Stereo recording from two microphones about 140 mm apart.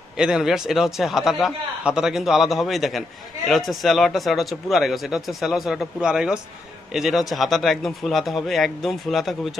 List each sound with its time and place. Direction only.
0.2 s a man's voice: 5° right (ahead or behind)